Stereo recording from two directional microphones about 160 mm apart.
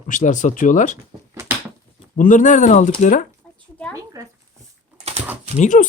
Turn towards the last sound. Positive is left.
turn(degrees=55)  # may be behind; listen again after turning